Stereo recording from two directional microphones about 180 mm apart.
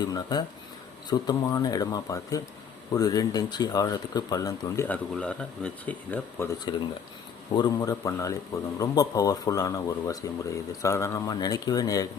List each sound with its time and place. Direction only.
0.0 s speech: 25° left (ahead or behind)
4.9 s speech: 5° left (ahead or behind)
7.5 s speech: 20° left (ahead or behind)